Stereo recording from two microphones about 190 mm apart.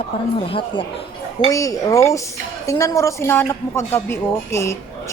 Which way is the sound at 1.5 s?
15° left (ahead or behind).